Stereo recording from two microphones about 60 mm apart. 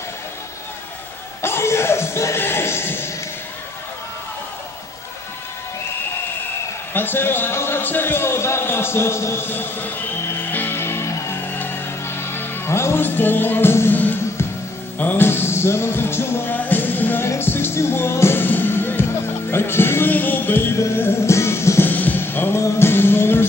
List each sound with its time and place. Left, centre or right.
1.4 s a sound: left
6.9 s a man's voice: left
9.5 s a man's voice: left
10.2 s music: left
13.0 s a man's voice: left
15.0 s music: left
15.2 s music: left
19.5 s a man's voice: left
20.7 s music: left
21.9 s basketball bounce: left
22.6 s a man's voice: left